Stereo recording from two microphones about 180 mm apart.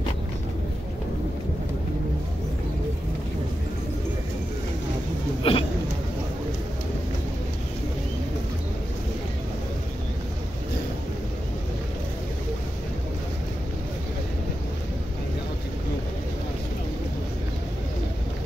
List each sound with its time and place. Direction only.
5.4 s hiccup: 30° left (ahead or behind)